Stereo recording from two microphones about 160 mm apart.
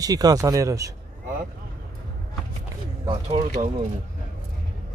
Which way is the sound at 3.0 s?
35° right (ahead or behind).